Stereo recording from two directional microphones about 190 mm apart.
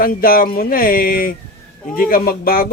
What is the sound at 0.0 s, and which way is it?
Speech, 50° left (ahead or behind).